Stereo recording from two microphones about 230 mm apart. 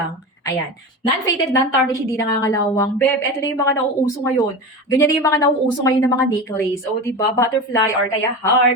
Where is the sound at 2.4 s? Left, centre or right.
Centre.